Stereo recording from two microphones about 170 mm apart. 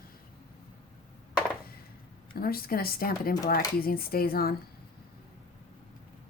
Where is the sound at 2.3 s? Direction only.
60° left (ahead or behind).